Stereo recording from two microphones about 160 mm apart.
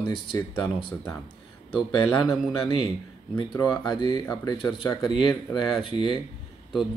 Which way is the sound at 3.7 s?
30° left (ahead or behind).